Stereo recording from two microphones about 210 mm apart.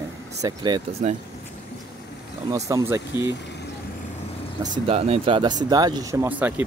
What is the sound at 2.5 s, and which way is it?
Speech, 15° right (ahead or behind).